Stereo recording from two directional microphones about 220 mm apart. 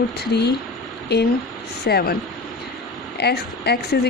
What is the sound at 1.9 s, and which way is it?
Speech, 45° left (ahead or behind).